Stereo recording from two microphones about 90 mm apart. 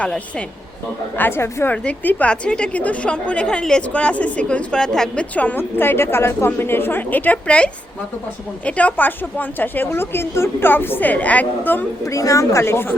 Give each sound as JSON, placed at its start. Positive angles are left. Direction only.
{"t": 0.0, "sound": "a woman's voice", "side_deg": 15}
{"t": 1.1, "sound": "a woman's voice", "side_deg": 25}
{"t": 12.0, "sound": "a woman's voice", "side_deg": 35}